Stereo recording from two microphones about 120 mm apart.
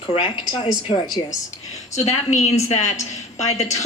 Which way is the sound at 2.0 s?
65° left (ahead or behind).